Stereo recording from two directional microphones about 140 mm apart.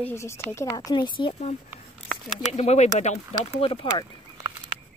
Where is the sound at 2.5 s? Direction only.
50° left (ahead or behind).